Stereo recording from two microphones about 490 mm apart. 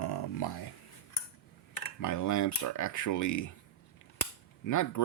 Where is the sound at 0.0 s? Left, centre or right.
Left.